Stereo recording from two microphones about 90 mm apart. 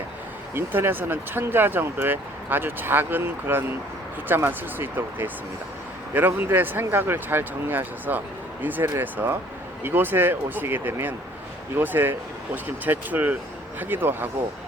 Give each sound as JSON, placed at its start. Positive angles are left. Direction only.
{"t": 0.5, "sound": "speech", "side_deg": -25}